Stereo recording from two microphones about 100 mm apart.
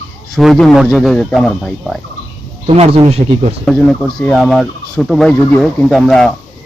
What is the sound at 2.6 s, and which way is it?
Speech, 90° right.